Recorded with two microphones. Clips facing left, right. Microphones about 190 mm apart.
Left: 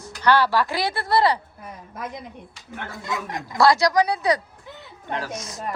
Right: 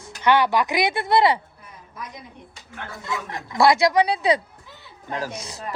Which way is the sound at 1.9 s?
55° left (ahead or behind).